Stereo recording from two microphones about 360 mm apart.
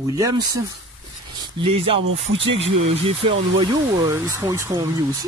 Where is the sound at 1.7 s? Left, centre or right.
Centre.